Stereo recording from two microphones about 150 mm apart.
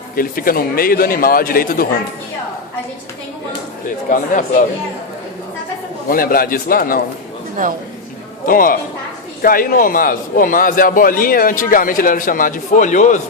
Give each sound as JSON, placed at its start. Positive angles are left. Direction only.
{"t": 0.2, "sound": "a man's voice", "side_deg": 75}
{"t": 6.1, "sound": "a man's voice", "side_deg": 75}
{"t": 7.6, "sound": "a woman's voice", "side_deg": -60}
{"t": 8.4, "sound": "a man's voice", "side_deg": 70}